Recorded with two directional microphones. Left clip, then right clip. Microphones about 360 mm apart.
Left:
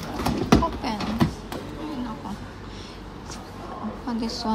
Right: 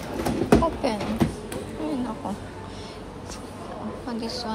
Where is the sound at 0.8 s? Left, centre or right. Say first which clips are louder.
Right 4 dB; centre.